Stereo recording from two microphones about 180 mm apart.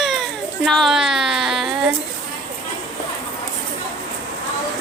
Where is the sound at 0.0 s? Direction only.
Centre (ahead or behind).